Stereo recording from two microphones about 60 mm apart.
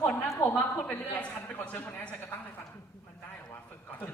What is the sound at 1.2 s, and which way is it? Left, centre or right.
Speech, left.